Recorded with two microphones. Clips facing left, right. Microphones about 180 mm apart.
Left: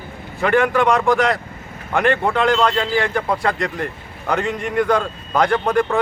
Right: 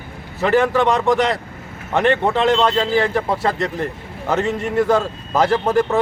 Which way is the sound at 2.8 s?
25° right (ahead or behind).